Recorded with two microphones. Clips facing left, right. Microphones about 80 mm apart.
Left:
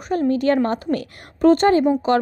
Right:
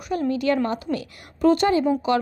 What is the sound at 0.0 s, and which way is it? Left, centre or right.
A woman's voice, left.